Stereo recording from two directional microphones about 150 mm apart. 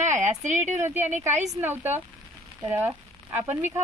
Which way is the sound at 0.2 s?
55° right (ahead or behind).